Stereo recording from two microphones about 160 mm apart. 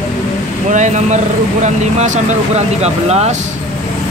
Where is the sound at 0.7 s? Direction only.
50° right (ahead or behind).